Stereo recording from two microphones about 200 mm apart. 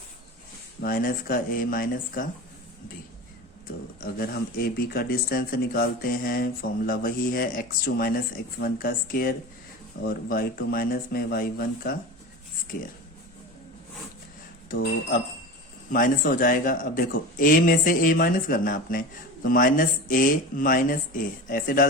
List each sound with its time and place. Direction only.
0.8 s speech: 45° left (ahead or behind)
4.0 s speech: 50° left (ahead or behind)
14.7 s speech: 45° left (ahead or behind)